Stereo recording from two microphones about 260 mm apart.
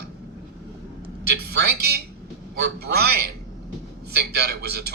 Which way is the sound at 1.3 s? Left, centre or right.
Right.